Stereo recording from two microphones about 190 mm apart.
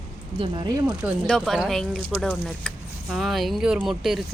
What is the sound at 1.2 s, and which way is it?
Speech, centre (ahead or behind).